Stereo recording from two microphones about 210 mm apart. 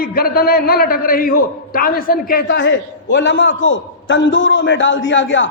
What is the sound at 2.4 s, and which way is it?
A man's voice, 55° left (ahead or behind).